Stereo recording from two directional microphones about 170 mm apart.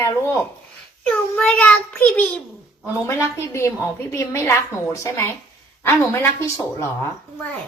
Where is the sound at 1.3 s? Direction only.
5° left (ahead or behind).